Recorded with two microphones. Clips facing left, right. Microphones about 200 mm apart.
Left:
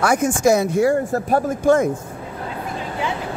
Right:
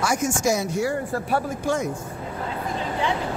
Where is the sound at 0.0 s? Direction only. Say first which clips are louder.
Left 6 dB; 60° left (ahead or behind).